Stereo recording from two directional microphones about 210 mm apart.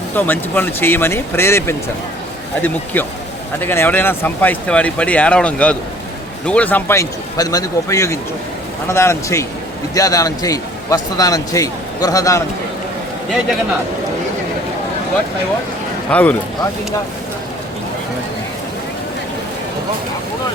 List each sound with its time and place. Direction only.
0.2 s a man's voice: 10° left (ahead or behind)
16.0 s speech: 5° left (ahead or behind)